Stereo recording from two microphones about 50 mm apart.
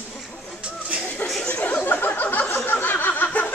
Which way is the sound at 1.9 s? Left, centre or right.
Left.